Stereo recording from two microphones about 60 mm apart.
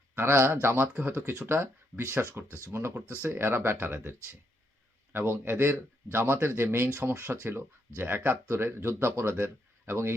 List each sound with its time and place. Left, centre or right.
0.2 s speech: right
5.1 s speech: right